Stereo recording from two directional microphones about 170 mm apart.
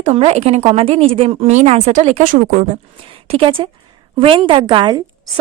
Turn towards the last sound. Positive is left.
turn(degrees=-30)  # may be behind; listen again after turning